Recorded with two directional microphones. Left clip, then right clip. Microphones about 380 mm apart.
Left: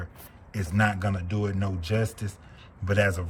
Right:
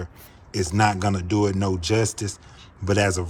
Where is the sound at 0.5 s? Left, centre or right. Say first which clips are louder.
Right 6 dB; centre.